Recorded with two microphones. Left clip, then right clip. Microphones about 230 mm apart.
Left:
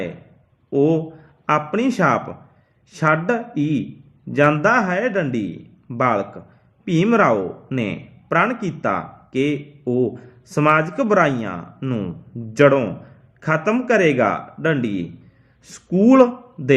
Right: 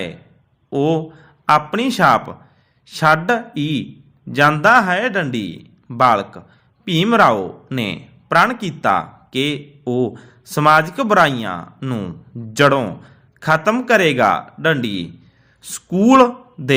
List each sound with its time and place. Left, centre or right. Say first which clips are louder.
0.7 s speech: even; right
6.0 s a man's voice: right 5 dB; right
6.8 s a man's voice: right 3 dB; right
15.9 s a man's voice: right 1 dB; right
16.1 s a man's voice: right 4 dB; right